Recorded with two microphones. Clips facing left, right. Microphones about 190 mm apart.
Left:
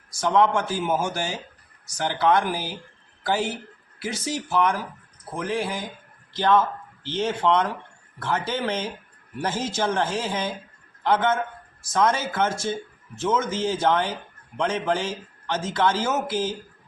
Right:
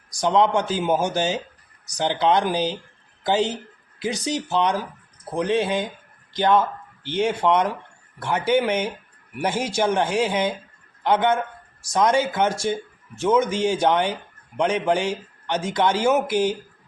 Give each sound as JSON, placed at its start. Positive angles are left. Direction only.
{"t": 0.1, "sound": "a man's voice", "side_deg": -20}